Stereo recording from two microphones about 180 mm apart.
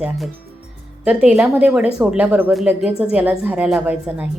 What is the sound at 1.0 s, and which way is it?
Speech, 5° right (ahead or behind).